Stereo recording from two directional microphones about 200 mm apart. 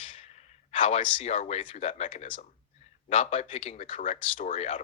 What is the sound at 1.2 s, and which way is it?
A man's voice, 35° left (ahead or behind).